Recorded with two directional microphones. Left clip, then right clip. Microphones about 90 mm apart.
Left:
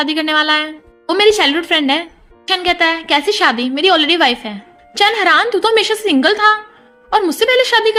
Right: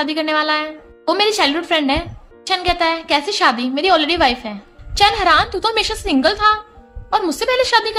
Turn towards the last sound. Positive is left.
turn(degrees=35)  # may be behind; listen again after turning